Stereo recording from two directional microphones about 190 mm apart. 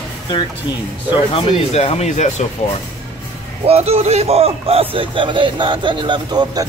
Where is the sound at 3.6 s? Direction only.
30° right (ahead or behind).